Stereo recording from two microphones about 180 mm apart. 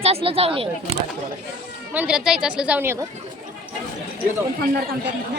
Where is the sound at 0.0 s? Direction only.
30° right (ahead or behind).